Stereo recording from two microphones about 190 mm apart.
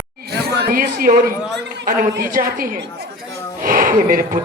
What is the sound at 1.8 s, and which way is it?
Speech, 45° right (ahead or behind).